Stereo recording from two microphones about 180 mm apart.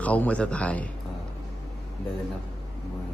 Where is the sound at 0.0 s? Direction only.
10° left (ahead or behind).